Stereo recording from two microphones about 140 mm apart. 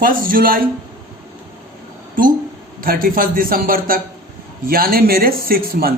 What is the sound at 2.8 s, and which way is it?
Speech, 90° right.